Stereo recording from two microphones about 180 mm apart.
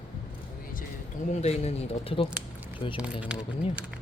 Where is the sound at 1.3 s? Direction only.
35° left (ahead or behind).